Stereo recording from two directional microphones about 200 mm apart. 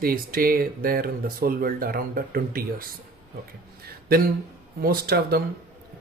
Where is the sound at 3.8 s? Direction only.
50° right (ahead or behind).